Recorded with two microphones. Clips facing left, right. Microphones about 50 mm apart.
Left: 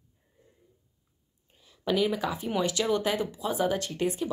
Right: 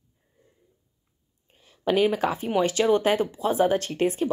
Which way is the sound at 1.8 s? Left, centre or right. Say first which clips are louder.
Right 5 dB; right.